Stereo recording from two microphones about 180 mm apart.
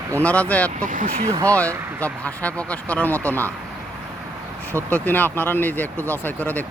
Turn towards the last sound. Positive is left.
turn(degrees=10)  # may be behind; listen again after turning